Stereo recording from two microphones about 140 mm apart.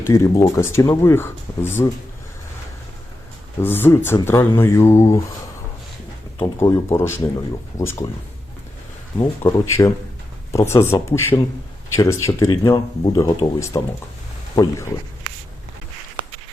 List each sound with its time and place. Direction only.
0.0 s speech: 25° left (ahead or behind)
3.6 s speech: 15° left (ahead or behind)
6.4 s speech: 25° left (ahead or behind)
9.1 s speech: 20° left (ahead or behind)